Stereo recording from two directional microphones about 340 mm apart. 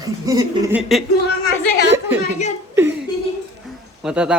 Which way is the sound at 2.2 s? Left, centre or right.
Centre.